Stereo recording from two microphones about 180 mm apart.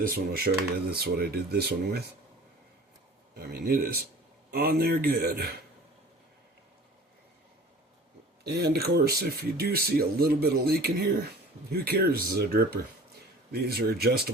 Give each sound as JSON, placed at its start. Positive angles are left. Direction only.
{"t": 0.0, "sound": "speech", "side_deg": -55}
{"t": 3.3, "sound": "speech", "side_deg": -55}
{"t": 8.4, "sound": "speech", "side_deg": -65}